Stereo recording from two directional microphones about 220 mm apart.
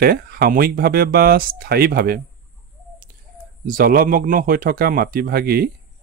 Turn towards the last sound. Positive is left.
turn(degrees=-45)  # may be behind; listen again after turning